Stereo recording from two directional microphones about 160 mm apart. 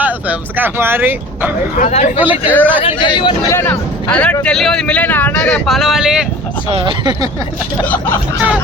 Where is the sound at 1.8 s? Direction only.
45° left (ahead or behind).